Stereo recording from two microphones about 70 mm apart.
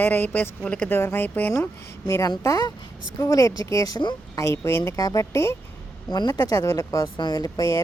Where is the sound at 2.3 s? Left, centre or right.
Left.